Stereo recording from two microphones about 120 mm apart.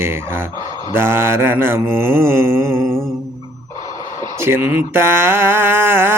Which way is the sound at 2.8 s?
5° left (ahead or behind).